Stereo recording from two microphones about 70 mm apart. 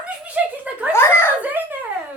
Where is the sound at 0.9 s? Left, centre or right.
Left.